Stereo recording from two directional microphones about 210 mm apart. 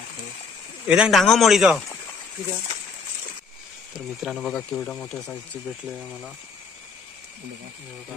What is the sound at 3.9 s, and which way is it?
Speech, centre (ahead or behind).